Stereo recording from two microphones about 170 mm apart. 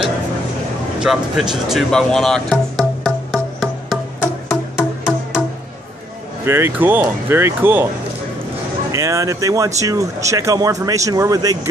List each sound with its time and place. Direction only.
0.9 s speech: 5° right (ahead or behind)
4.7 s music: centre (ahead or behind)
6.4 s speech: 15° right (ahead or behind)
8.9 s speech: 20° right (ahead or behind)